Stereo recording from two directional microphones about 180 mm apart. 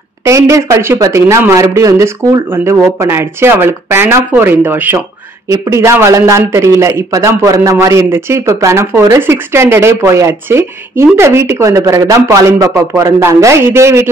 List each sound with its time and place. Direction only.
0.2 s speech: 15° right (ahead or behind)